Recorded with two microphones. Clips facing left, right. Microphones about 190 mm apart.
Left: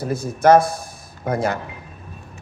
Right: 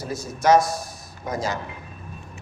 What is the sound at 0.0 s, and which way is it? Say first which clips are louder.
A man's voice: left 6 dB; 55° left (ahead or behind).